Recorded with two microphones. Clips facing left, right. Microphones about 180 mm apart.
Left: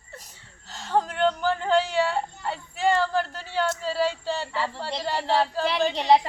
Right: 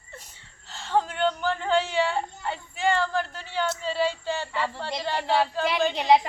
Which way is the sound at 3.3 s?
40° left (ahead or behind).